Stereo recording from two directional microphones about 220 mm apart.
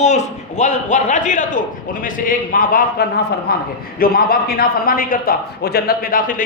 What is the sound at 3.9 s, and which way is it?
A man's voice, 40° left (ahead or behind).